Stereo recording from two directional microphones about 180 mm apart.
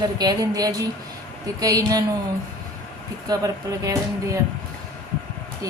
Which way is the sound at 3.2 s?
20° right (ahead or behind).